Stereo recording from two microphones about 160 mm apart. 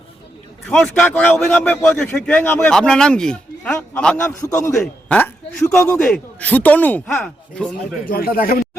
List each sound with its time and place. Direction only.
0.7 s a man's voice: 5° left (ahead or behind)
4.4 s a man's voice: 20° left (ahead or behind)
4.8 s a man's voice: 10° left (ahead or behind)
8.0 s speech: 65° left (ahead or behind)